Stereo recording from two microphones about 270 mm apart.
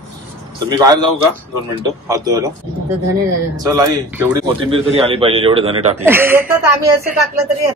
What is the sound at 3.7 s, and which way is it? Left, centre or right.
A man's voice, centre.